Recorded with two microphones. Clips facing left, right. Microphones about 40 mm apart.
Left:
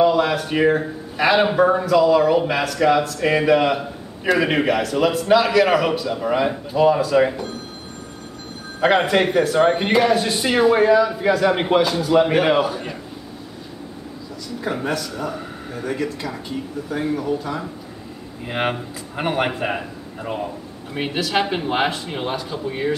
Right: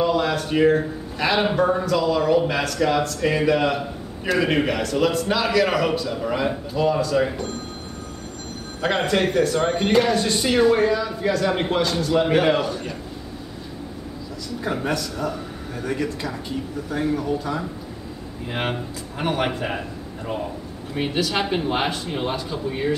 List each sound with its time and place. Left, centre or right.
0.0 s a man's voice: centre
8.8 s a man's voice: centre
14.6 s speech: centre
18.5 s a man's voice: centre
20.9 s a man's voice: centre